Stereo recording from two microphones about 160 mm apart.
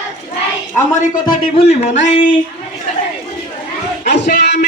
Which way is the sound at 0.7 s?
15° left (ahead or behind).